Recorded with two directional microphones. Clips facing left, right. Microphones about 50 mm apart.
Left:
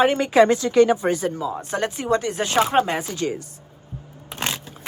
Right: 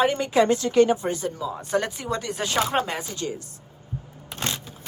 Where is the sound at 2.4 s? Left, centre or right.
Left.